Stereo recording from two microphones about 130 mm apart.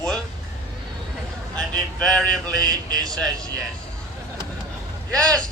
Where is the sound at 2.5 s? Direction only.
30° right (ahead or behind).